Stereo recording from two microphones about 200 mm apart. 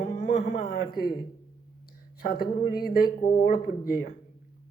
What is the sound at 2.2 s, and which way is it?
Speech, 50° left (ahead or behind).